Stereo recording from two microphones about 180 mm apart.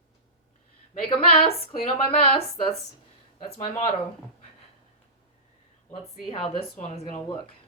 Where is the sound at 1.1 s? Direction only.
30° left (ahead or behind).